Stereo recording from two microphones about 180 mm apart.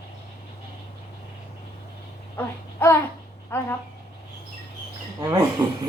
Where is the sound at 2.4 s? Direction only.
15° left (ahead or behind).